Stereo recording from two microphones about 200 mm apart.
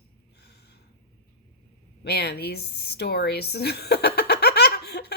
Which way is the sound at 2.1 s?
55° left (ahead or behind).